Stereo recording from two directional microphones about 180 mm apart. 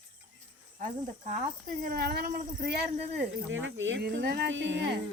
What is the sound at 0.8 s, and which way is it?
Speech, 50° right (ahead or behind).